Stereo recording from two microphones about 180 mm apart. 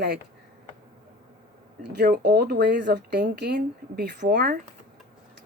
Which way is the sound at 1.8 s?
65° right (ahead or behind).